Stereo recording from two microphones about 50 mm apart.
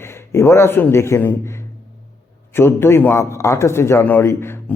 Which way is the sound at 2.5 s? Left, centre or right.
Left.